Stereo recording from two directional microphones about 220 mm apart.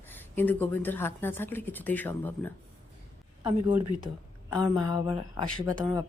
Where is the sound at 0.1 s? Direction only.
10° left (ahead or behind).